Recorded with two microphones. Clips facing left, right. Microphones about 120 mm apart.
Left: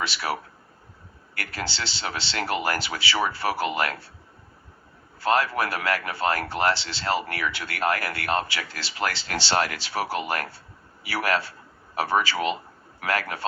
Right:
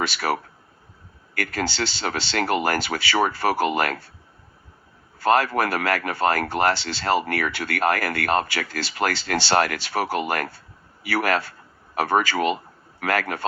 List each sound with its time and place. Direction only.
0.0 s speech: 50° right (ahead or behind)
1.5 s speech: 45° right (ahead or behind)
5.2 s speech: 45° right (ahead or behind)